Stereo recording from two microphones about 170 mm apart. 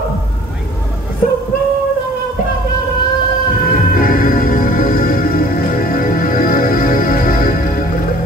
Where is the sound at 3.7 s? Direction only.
55° left (ahead or behind).